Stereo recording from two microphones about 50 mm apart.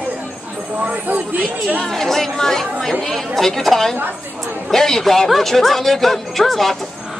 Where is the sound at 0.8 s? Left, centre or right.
Right.